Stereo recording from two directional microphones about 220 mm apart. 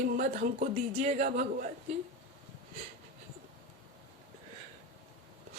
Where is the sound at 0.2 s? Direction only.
35° right (ahead or behind).